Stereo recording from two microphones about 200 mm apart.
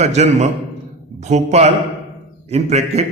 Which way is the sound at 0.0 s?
35° right (ahead or behind).